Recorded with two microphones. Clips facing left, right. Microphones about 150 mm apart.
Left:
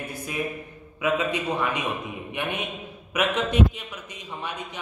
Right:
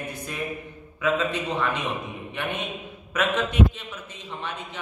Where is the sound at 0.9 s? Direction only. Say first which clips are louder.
Even; 15° left (ahead or behind).